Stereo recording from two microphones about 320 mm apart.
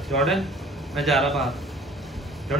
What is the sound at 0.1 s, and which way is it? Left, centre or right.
A man's voice, centre.